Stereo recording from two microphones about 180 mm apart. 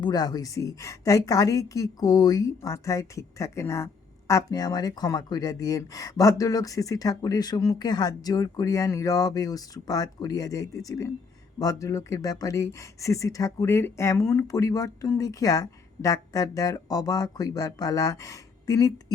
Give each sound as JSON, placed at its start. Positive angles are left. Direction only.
{"t": 0.0, "sound": "a woman's voice", "side_deg": 20}